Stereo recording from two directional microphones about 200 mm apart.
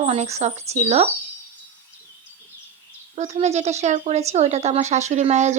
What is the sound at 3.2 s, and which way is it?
Speech, 35° right (ahead or behind).